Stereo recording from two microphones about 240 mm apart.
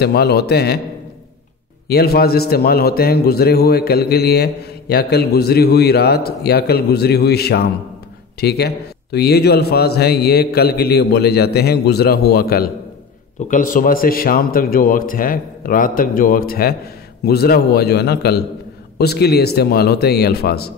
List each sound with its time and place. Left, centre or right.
0.0 s a man's voice: left
1.9 s a man's voice: left